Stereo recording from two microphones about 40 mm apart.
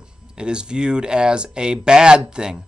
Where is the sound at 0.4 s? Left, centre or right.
Right.